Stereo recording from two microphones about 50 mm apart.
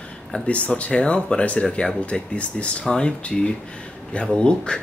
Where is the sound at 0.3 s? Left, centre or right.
Left.